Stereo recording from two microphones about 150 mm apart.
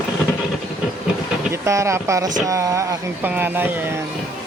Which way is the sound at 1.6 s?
20° right (ahead or behind).